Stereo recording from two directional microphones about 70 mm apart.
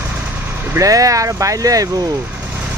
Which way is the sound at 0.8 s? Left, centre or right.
Right.